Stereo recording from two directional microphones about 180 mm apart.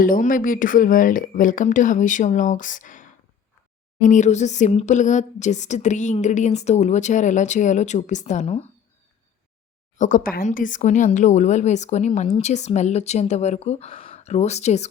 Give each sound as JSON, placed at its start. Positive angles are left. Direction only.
{"t": 0.0, "sound": "speech", "side_deg": 50}
{"t": 4.1, "sound": "a woman's voice", "side_deg": 40}
{"t": 10.0, "sound": "a woman's voice", "side_deg": 50}